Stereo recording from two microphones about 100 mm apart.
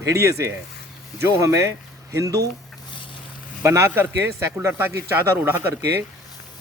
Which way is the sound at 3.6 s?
25° right (ahead or behind).